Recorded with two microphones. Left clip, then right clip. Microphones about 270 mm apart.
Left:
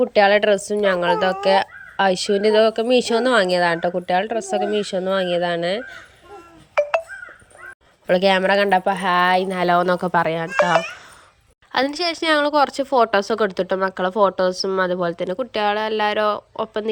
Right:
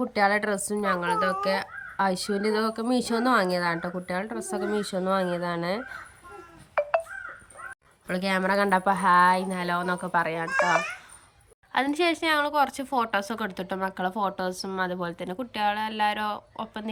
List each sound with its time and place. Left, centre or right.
0.0 s speech: centre
8.0 s speech: centre